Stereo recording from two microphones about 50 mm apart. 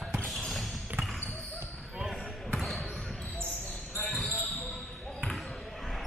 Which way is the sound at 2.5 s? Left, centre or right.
Centre.